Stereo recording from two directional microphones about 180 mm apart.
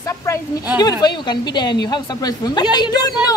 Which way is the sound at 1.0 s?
25° left (ahead or behind).